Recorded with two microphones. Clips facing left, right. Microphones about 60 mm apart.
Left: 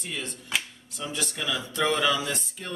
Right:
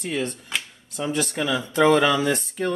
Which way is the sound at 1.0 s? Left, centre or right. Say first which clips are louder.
Right 8 dB; right.